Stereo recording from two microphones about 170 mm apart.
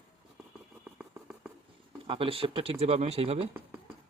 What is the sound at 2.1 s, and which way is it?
Speech, 35° right (ahead or behind).